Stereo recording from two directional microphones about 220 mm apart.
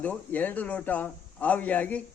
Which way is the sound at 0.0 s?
5° left (ahead or behind).